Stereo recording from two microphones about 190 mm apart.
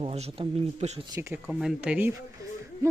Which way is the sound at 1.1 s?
15° right (ahead or behind).